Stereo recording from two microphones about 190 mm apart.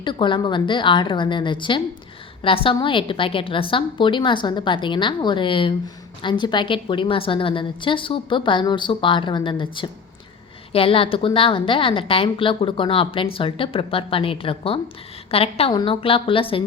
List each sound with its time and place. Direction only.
0.0 s a woman's voice: 25° left (ahead or behind)